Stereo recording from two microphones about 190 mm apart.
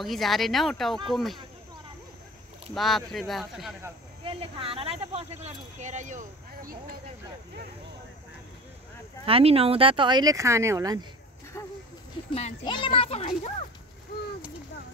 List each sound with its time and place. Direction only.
0.0 s speech: centre (ahead or behind)
2.7 s speech: centre (ahead or behind)
4.2 s speech: 30° right (ahead or behind)
9.2 s speech: 30° right (ahead or behind)
11.6 s a sound: 15° left (ahead or behind)
12.3 s speech: 30° left (ahead or behind)